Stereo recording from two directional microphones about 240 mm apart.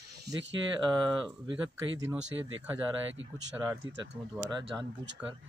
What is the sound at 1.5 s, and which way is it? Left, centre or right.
Speech, centre.